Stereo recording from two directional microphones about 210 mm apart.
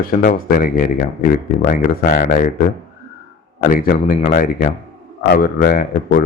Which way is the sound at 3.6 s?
40° left (ahead or behind).